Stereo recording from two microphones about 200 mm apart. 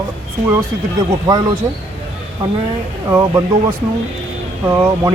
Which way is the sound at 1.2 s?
20° right (ahead or behind).